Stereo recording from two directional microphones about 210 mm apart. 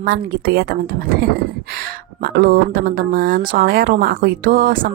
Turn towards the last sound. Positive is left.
turn(degrees=-40)  # may be behind; listen again after turning